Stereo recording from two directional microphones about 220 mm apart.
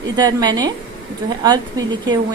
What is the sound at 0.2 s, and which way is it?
A woman's voice, 20° right (ahead or behind).